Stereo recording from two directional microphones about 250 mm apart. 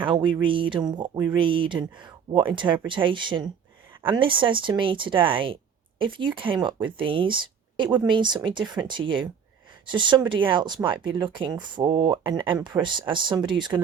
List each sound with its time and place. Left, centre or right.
0.0 s speech: centre